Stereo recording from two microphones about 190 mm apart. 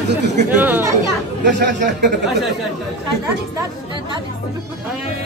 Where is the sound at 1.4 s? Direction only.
65° right (ahead or behind).